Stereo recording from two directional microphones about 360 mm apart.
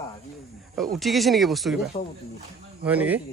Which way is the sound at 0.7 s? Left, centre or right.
Centre.